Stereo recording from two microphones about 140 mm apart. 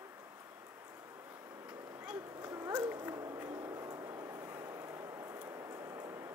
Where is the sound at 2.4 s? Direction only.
20° right (ahead or behind).